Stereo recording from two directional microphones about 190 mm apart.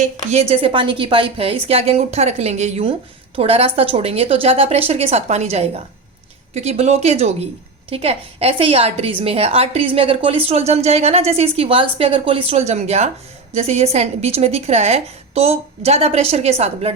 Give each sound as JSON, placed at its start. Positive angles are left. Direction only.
{"t": 0.0, "sound": "a woman's voice", "side_deg": -35}